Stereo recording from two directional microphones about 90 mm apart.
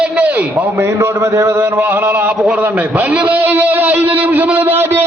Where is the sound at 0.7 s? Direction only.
30° right (ahead or behind).